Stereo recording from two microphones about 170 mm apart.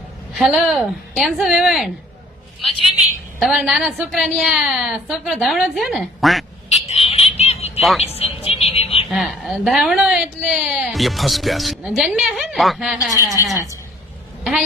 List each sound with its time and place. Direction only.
0.3 s a woman's voice: centre (ahead or behind)
3.4 s a woman's voice: centre (ahead or behind)
6.7 s frog: 40° left (ahead or behind)
7.8 s a woman's voice: centre (ahead or behind)
8.0 s music: 35° left (ahead or behind)
9.0 s a woman's voice: centre (ahead or behind)
13.2 s a woman's voice: 20° left (ahead or behind)